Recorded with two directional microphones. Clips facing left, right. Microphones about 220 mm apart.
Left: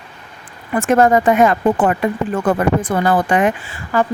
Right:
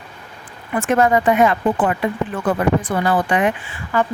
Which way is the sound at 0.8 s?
45° left (ahead or behind).